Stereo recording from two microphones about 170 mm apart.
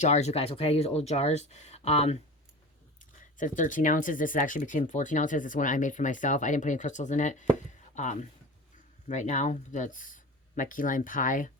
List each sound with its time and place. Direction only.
0.0 s speech: 40° left (ahead or behind)
3.3 s speech: 50° left (ahead or behind)